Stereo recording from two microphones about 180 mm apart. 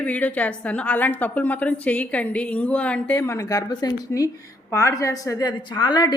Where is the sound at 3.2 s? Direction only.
15° left (ahead or behind).